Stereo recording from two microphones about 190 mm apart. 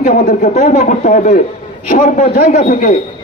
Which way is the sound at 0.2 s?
55° left (ahead or behind).